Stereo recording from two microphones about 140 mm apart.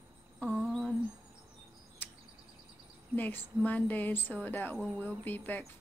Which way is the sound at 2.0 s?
15° left (ahead or behind).